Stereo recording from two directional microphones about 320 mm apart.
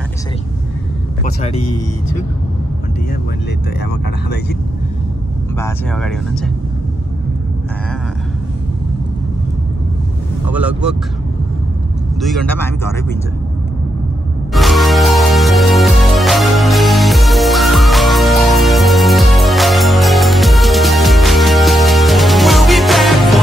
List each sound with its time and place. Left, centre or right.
1.2 s speech: centre
5.6 s speech: centre
10.5 s speech: centre
12.2 s speech: centre
14.5 s music: centre